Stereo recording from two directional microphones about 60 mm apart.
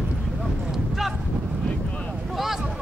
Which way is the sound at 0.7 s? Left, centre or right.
Centre.